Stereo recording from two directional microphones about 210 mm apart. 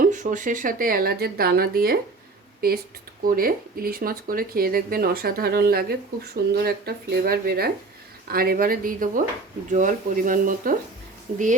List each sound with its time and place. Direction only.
0.0 s speech: 40° right (ahead or behind)